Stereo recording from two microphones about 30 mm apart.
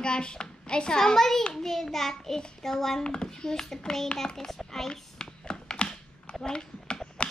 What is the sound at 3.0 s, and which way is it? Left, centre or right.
Speech, left.